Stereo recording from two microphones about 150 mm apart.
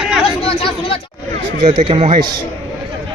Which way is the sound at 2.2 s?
30° right (ahead or behind).